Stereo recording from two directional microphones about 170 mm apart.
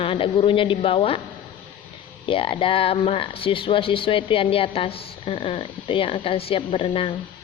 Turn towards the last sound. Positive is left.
turn(degrees=35)  # may be behind; listen again after turning